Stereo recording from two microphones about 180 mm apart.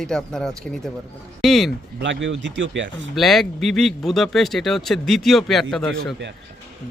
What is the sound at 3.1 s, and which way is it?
Speech, centre (ahead or behind).